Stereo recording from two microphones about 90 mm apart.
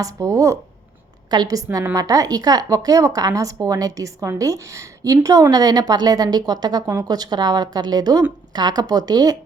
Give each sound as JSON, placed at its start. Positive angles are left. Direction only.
{"t": 0.0, "sound": "speech", "side_deg": -35}
{"t": 1.3, "sound": "a woman's voice", "side_deg": -45}